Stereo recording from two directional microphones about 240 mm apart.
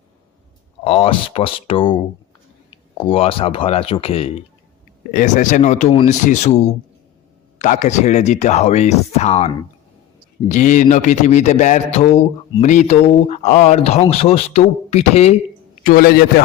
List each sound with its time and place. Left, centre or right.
0.9 s a man's voice: left
7.6 s a man's voice: left
10.5 s a man's voice: left
15.8 s a man's voice: left